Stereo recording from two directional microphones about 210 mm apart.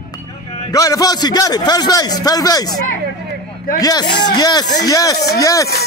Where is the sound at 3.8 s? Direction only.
20° left (ahead or behind).